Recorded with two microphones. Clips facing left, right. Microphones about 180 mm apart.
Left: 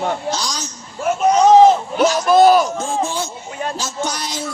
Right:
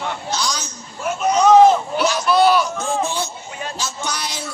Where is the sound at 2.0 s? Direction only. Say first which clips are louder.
Left 5 dB; 45° left (ahead or behind).